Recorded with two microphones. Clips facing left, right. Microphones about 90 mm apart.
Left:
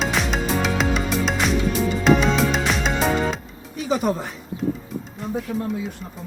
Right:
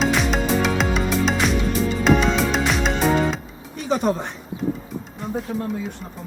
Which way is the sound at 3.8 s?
Centre (ahead or behind).